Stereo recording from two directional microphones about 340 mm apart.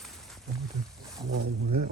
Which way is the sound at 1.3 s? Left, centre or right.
Right.